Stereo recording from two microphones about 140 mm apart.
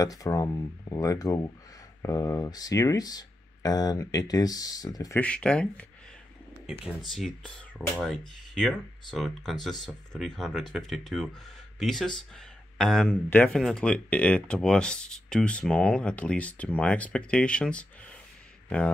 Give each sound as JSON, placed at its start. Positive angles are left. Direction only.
{"t": 0.0, "sound": "speech", "side_deg": 25}
{"t": 5.1, "sound": "speech", "side_deg": 10}
{"t": 7.0, "sound": "speech", "side_deg": 0}